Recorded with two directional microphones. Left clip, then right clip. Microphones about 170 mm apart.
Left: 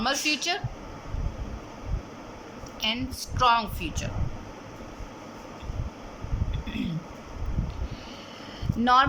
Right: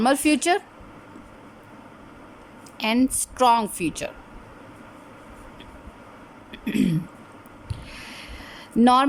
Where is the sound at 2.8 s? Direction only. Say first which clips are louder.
Right 6 dB; 35° right (ahead or behind).